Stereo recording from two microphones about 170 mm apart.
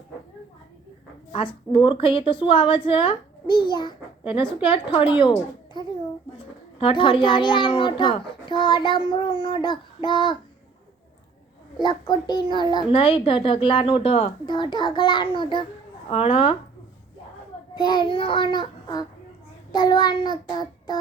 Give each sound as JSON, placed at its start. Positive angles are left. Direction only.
{"t": 1.3, "sound": "a woman's voice", "side_deg": 30}
{"t": 11.8, "sound": "a child's voice", "side_deg": 25}
{"t": 17.7, "sound": "a child's voice", "side_deg": 25}